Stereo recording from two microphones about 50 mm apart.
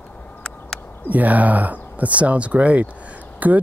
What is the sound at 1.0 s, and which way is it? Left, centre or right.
Speech, right.